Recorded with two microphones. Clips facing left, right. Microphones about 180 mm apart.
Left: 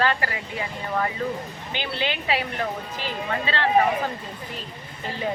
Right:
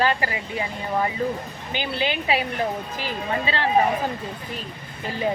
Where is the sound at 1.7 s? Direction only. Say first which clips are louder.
Right 3 dB; 15° right (ahead or behind).